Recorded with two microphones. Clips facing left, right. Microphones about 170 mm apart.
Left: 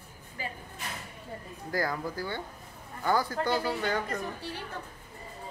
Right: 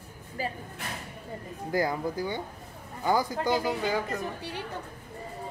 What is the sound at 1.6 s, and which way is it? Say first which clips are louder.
Speech: right 4 dB; 20° right (ahead or behind).